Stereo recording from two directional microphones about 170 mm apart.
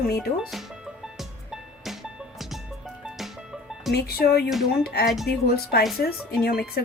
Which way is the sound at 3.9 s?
65° left (ahead or behind).